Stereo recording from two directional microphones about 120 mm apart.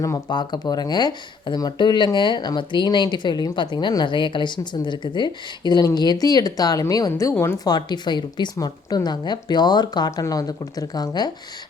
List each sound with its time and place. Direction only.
0.0 s speech: 30° left (ahead or behind)
7.7 s speech: 35° left (ahead or behind)